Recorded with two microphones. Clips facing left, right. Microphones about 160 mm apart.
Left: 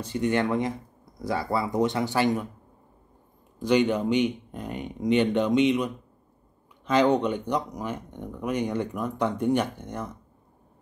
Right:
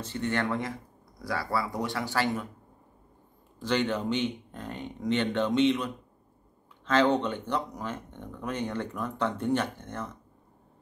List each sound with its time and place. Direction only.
0.0 s speech: 15° left (ahead or behind)
3.5 s speech: 15° left (ahead or behind)
6.9 s speech: 15° left (ahead or behind)